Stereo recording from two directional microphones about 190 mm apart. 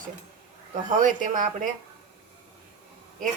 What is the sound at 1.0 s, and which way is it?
Speech, 45° right (ahead or behind).